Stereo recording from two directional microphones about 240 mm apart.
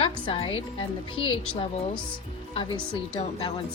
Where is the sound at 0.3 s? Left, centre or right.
Left.